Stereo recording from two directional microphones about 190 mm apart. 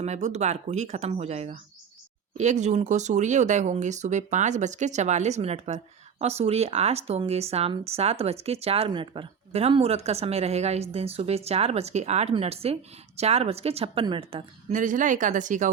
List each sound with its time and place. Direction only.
0.0 s speech: 35° right (ahead or behind)
14.7 s speech: 40° right (ahead or behind)